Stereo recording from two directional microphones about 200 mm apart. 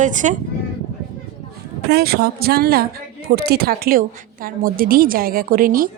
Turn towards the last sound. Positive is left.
turn(degrees=-45)  # may be behind; listen again after turning